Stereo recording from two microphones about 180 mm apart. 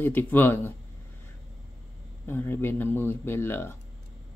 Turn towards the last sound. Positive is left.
turn(degrees=15)  # may be behind; listen again after turning